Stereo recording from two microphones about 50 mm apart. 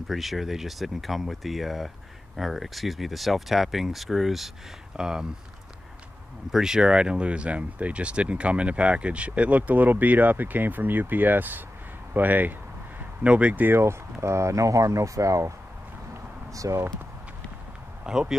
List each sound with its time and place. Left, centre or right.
0.1 s speech: centre
4.9 s speech: centre
6.5 s speech: centre; by 12.5 s right
13.2 s speech: right
13.6 s speech: right
14.2 s speech: right
16.5 s speech: right
18.1 s speech: centre